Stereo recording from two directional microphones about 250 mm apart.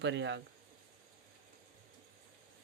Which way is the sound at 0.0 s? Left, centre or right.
Right.